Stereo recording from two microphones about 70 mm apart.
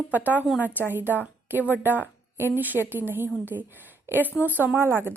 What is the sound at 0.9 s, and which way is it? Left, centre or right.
A woman's voice, right.